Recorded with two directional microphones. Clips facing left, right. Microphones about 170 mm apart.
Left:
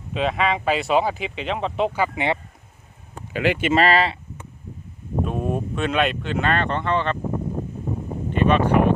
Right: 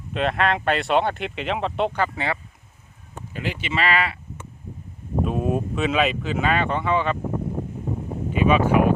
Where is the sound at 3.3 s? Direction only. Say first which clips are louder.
Left 8 dB; 75° left (ahead or behind).